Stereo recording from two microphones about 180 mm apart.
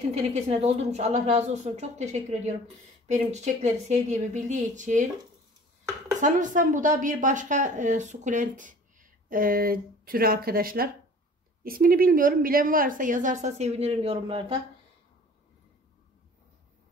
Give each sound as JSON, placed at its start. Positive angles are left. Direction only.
{"t": 0.1, "sound": "a woman's voice", "side_deg": -35}
{"t": 6.2, "sound": "a woman's voice", "side_deg": -45}